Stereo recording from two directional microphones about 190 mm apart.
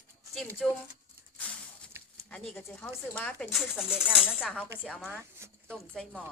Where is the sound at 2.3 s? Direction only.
5° left (ahead or behind).